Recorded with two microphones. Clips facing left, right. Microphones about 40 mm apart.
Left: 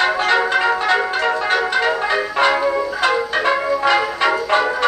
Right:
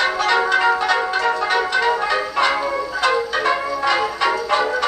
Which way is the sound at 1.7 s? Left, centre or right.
Left.